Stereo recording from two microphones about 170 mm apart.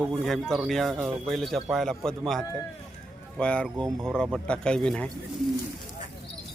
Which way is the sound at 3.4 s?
5° left (ahead or behind).